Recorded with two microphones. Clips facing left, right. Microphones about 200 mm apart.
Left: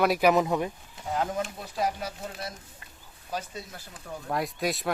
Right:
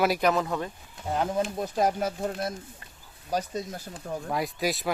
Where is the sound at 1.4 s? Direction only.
45° right (ahead or behind).